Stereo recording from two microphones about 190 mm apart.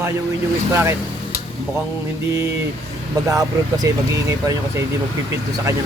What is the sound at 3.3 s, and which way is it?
Speech, 20° right (ahead or behind).